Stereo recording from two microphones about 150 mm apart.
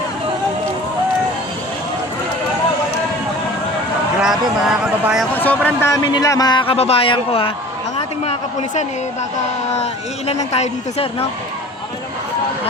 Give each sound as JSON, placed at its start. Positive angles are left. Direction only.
{"t": 4.2, "sound": "speech", "side_deg": -5}
{"t": 5.3, "sound": "speech", "side_deg": 10}